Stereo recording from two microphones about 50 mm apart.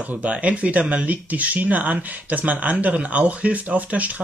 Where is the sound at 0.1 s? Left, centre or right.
Right.